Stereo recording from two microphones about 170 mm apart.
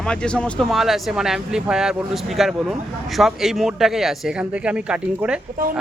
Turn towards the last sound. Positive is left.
turn(degrees=-5)  # may be behind; listen again after turning